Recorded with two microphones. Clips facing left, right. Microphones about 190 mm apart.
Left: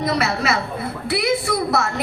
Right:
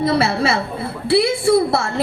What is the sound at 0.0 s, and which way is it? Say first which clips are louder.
A woman's voice: right 4 dB; 30° right (ahead or behind).